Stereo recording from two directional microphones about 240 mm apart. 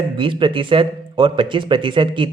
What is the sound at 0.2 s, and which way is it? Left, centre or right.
Speech, right.